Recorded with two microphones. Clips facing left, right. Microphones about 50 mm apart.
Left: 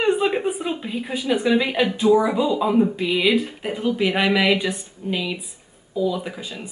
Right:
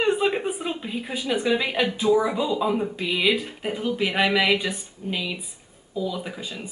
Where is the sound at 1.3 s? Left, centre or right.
Centre.